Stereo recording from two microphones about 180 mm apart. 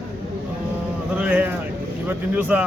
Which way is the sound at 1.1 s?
10° right (ahead or behind).